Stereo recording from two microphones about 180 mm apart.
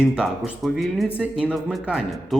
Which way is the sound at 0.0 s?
5° right (ahead or behind).